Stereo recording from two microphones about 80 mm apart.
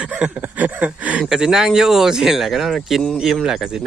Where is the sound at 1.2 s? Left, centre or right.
Centre.